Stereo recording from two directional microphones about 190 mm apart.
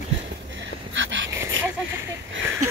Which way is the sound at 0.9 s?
75° right (ahead or behind).